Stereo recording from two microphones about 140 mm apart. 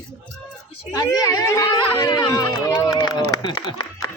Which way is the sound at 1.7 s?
35° left (ahead or behind).